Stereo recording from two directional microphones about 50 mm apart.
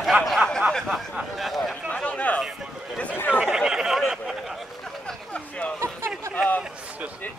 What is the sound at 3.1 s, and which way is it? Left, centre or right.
Speech, left.